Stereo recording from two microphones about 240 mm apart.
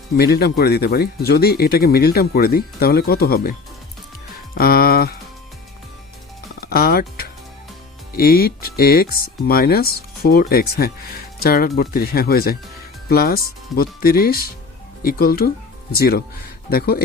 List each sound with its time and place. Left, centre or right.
0.2 s speech: left
4.5 s speech: left
6.6 s speech: left